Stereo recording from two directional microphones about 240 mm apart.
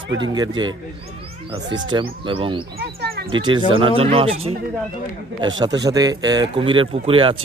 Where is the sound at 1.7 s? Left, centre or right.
Right.